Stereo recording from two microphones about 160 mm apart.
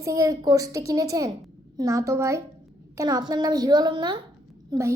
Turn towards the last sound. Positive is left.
turn(degrees=-25)  # may be behind; listen again after turning